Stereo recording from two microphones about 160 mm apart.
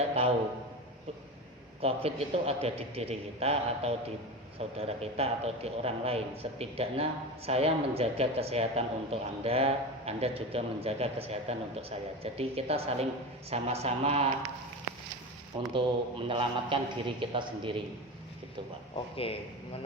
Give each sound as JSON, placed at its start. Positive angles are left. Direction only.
{"t": 1.8, "sound": "a man's voice", "side_deg": -40}
{"t": 15.7, "sound": "a man's voice", "side_deg": -30}
{"t": 19.1, "sound": "a man's voice", "side_deg": 35}